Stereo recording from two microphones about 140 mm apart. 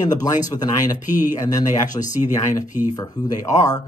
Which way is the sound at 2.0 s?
60° left (ahead or behind).